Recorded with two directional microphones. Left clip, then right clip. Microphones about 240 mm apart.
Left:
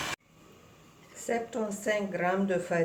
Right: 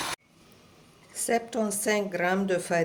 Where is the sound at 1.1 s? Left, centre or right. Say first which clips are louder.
Right 5 dB; right.